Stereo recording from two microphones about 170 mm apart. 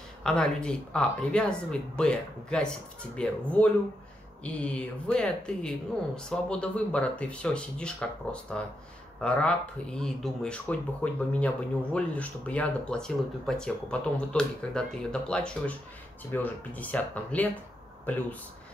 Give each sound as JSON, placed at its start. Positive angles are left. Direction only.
{"t": 0.2, "sound": "speech", "side_deg": 5}